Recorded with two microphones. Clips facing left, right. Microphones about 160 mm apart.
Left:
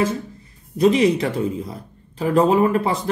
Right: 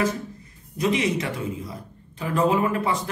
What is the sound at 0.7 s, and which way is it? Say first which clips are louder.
Speech: left 7 dB; 35° left (ahead or behind).